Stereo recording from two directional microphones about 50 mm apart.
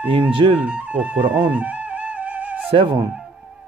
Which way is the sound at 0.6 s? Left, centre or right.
Right.